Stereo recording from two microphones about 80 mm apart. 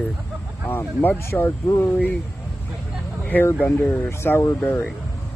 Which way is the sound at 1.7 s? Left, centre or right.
Left.